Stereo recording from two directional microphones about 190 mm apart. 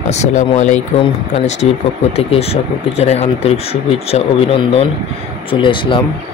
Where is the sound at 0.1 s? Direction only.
40° left (ahead or behind).